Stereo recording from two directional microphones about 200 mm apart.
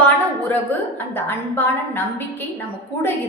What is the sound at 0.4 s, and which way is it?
A woman's voice, 10° left (ahead or behind).